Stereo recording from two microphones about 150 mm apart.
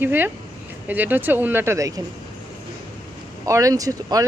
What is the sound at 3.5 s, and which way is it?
Speech, 20° right (ahead or behind).